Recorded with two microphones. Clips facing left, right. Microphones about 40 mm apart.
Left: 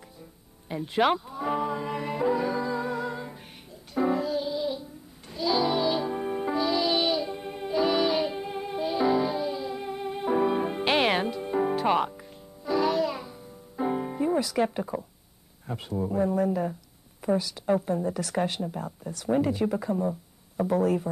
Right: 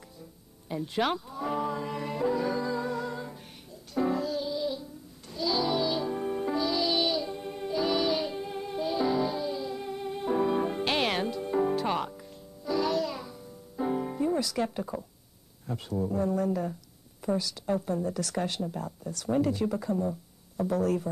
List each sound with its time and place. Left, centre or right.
0.7 s music: left
15.6 s speech: centre